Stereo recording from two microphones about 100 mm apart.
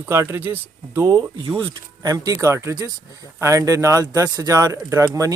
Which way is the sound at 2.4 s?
30° right (ahead or behind).